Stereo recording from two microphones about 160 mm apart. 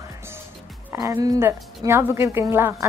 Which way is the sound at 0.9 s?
20° right (ahead or behind).